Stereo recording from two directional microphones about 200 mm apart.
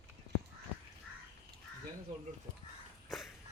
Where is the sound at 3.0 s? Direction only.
Centre (ahead or behind).